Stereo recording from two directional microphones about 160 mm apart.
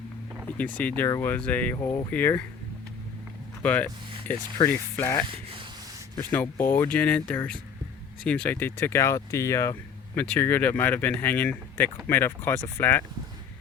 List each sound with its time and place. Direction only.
0.8 s speech: 10° left (ahead or behind)
3.6 s speech: 10° left (ahead or behind)